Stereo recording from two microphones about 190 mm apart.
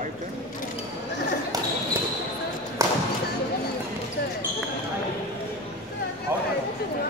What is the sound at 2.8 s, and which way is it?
Basketball bounce, 15° right (ahead or behind).